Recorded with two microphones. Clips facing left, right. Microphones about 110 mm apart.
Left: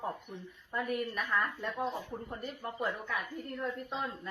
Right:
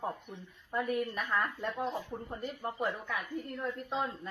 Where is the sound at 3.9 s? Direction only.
25° right (ahead or behind).